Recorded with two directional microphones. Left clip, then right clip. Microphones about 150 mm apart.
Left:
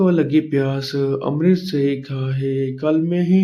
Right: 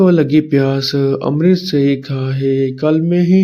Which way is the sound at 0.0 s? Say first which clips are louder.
Right 5 dB; 30° right (ahead or behind).